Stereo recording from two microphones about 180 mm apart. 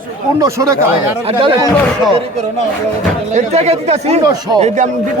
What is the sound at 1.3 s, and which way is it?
Speech, 30° right (ahead or behind).